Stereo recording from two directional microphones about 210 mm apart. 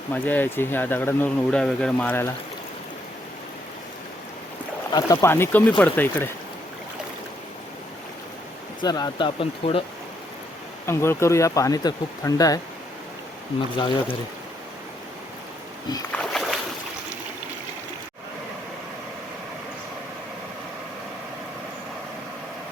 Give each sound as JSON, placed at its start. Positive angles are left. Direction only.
{"t": 0.1, "sound": "speech", "side_deg": 10}
{"t": 4.9, "sound": "speech", "side_deg": 20}
{"t": 8.8, "sound": "speech", "side_deg": 20}
{"t": 10.8, "sound": "speech", "side_deg": 10}
{"t": 16.1, "sound": "boat", "side_deg": 0}